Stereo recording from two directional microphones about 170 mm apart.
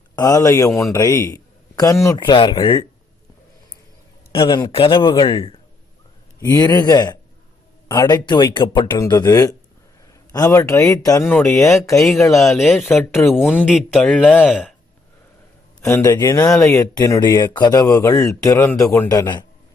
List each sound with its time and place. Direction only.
0.2 s speech: 20° left (ahead or behind)
4.3 s a man's voice: 25° left (ahead or behind); by 12.8 s centre (ahead or behind)
13.1 s speech: 15° left (ahead or behind)
13.7 s speech: centre (ahead or behind)
15.8 s speech: 20° left (ahead or behind)